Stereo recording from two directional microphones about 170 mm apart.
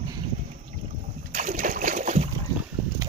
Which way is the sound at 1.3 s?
50° right (ahead or behind).